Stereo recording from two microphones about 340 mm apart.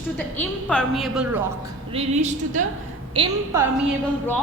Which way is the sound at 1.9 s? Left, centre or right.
Centre.